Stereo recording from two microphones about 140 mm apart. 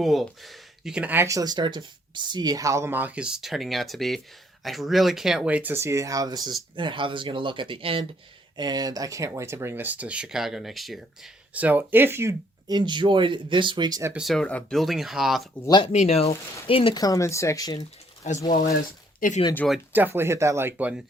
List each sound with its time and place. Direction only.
0.0 s speech: centre (ahead or behind); by 8.0 s 40° right (ahead or behind)
8.5 s speech: 30° right (ahead or behind); by 11.0 s centre (ahead or behind)
11.5 s speech: 10° right (ahead or behind)
12.7 s speech: 35° right (ahead or behind)
14.1 s speech: centre (ahead or behind)
15.6 s speech: 30° left (ahead or behind)
15.9 s speech: 50° left (ahead or behind)
17.0 s speech: 25° left (ahead or behind)
18.4 s speech: 80° left
19.9 s speech: 15° right (ahead or behind)